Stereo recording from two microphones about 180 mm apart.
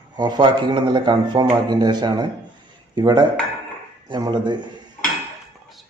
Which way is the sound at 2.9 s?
25° right (ahead or behind).